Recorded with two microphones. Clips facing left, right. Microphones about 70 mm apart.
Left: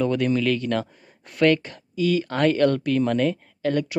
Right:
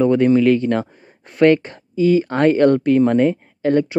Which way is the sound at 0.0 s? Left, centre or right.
Right.